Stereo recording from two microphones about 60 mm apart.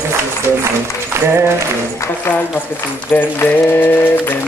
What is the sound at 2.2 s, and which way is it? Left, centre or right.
Speech, left.